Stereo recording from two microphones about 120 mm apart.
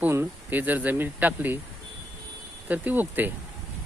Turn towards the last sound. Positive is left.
turn(degrees=-15)  # may be behind; listen again after turning